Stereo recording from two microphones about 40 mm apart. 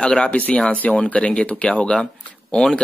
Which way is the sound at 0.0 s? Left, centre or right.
Left.